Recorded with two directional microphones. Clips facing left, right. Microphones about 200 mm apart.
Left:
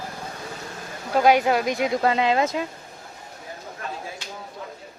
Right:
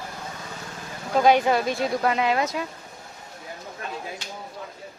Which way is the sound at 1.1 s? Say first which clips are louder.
Even; 10° left (ahead or behind).